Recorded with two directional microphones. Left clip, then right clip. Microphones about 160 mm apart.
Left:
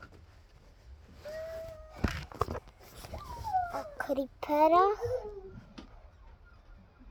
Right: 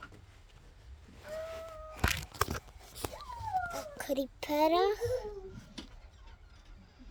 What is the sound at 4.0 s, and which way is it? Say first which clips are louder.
A child's voice: left 1 dB; 5° right (ahead or behind).